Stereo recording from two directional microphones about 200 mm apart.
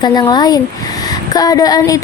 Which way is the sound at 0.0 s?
20° left (ahead or behind).